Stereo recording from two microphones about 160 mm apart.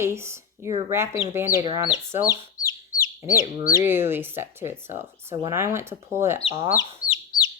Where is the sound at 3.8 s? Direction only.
15° right (ahead or behind).